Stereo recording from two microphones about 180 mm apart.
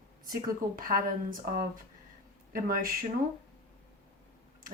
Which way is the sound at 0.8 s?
50° right (ahead or behind).